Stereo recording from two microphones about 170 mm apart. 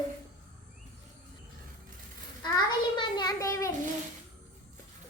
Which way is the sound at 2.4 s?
25° left (ahead or behind).